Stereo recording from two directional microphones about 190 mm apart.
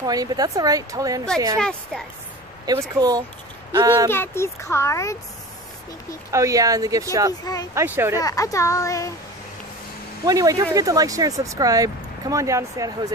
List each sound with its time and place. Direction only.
0.0 s a woman's voice: 20° right (ahead or behind)
1.6 s speech: 5° left (ahead or behind)
2.9 s a woman's voice: 20° right (ahead or behind)
4.1 s a child's voice: 10° left (ahead or behind)
6.3 s speech: 15° right (ahead or behind)
8.2 s a child's voice: 20° left (ahead or behind)
10.2 s speech: 20° right (ahead or behind)